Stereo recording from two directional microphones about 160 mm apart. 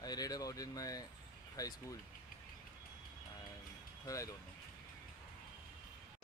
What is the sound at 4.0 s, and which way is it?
Speech, 20° left (ahead or behind).